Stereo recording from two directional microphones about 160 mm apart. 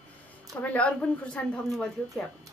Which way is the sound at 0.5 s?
10° left (ahead or behind).